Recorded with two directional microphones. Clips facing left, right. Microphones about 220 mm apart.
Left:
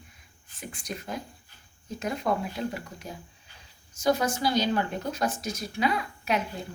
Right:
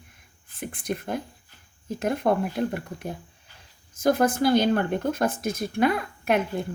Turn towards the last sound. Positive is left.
turn(degrees=-55)  # may be behind; listen again after turning